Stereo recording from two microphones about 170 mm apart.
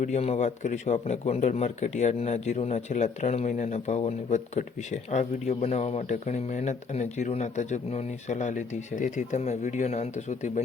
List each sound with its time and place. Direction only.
0.0 s a man's voice: 40° left (ahead or behind)